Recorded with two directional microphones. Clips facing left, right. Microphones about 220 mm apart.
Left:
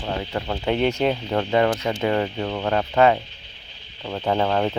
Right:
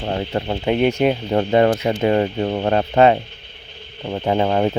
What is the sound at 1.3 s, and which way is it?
Speech, 35° right (ahead or behind).